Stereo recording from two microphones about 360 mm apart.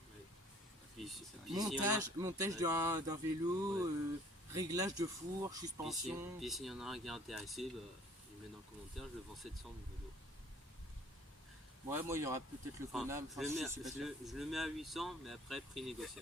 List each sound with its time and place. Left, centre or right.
0.9 s speech: centre
9.0 s speech: centre
11.9 s speech: centre